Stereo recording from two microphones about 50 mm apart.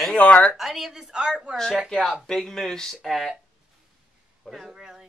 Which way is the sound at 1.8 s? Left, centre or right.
Centre.